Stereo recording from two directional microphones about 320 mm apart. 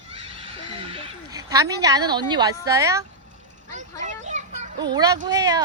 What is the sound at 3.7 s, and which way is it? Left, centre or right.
A child's voice, right.